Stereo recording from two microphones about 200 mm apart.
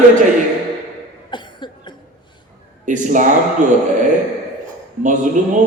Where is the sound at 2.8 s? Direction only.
40° right (ahead or behind).